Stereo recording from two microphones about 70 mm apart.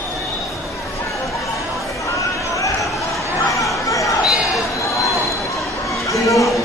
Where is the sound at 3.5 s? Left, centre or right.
Left.